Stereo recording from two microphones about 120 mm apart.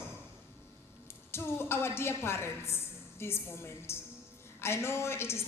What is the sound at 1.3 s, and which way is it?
A woman's voice, 20° left (ahead or behind).